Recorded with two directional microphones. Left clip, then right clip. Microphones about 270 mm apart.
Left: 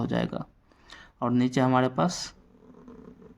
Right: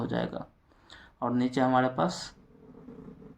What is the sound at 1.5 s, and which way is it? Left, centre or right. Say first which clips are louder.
Speech: even; left.